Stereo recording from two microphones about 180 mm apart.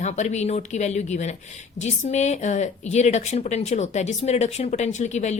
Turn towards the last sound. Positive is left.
turn(degrees=40)  # may be behind; listen again after turning